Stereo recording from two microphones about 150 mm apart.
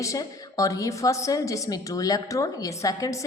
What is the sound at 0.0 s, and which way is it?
A woman's voice, 20° left (ahead or behind).